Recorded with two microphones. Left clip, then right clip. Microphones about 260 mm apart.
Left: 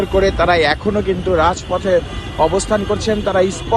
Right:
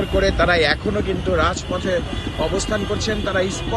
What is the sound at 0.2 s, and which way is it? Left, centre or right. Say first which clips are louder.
Speech: left 3 dB; centre.